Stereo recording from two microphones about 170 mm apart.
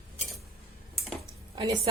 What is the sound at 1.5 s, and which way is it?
Speech, 25° right (ahead or behind).